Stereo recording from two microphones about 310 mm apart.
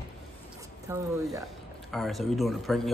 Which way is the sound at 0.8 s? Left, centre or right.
Centre.